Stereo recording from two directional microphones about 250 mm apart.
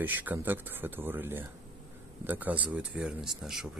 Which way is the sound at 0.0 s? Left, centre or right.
Centre.